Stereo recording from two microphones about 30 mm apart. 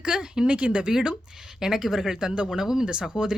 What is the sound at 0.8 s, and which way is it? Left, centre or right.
Speech, right.